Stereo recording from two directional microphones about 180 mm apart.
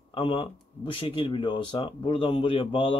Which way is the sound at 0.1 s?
30° left (ahead or behind).